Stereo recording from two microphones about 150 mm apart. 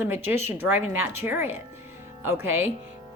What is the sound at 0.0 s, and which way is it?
A woman's voice, 15° right (ahead or behind).